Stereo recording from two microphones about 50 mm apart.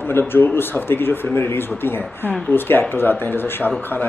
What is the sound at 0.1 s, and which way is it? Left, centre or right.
Speech, left.